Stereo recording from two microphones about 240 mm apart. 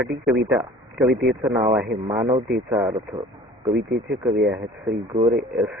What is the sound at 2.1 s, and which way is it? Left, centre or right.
Speech, centre.